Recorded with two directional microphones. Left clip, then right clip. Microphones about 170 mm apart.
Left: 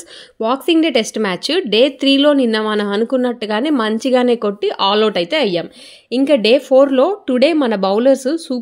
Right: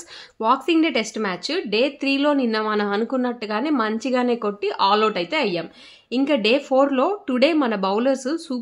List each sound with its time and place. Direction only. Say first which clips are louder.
0.4 s speech: left 4 dB; 25° left (ahead or behind)